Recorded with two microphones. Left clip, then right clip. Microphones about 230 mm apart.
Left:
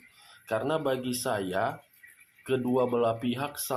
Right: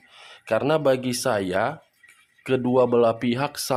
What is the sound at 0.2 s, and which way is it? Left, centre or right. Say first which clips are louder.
Speech: right 7 dB; right.